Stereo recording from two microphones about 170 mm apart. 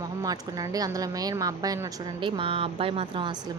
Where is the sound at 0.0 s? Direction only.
20° right (ahead or behind).